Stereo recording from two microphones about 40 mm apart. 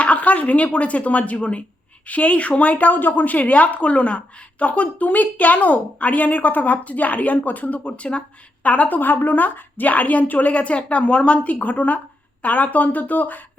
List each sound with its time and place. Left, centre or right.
0.0 s a woman's voice: left
9.9 s a woman's voice: left